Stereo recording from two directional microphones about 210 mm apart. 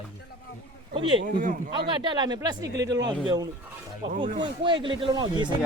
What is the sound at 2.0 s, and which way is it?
Speech, 20° right (ahead or behind).